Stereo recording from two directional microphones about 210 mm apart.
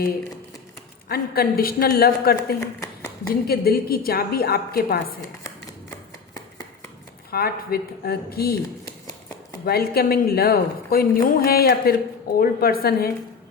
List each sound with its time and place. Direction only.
1.0 s a woman's voice: 45° left (ahead or behind)
7.3 s a woman's voice: 45° left (ahead or behind)
9.6 s a woman's voice: 45° left (ahead or behind)